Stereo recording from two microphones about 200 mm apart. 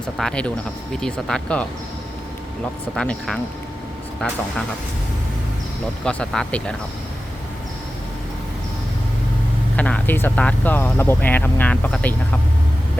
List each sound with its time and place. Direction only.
0.2 s speech: 5° left (ahead or behind)
2.9 s speech: 5° left (ahead or behind)
6.1 s speech: 5° left (ahead or behind)
9.7 s speech: 5° left (ahead or behind)